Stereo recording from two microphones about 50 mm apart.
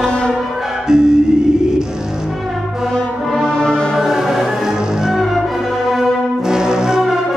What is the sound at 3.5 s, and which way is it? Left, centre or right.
Music, centre.